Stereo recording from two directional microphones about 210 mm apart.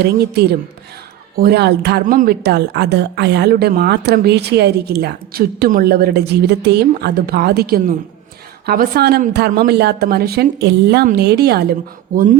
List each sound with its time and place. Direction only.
0.0 s a woman's voice: 50° right (ahead or behind)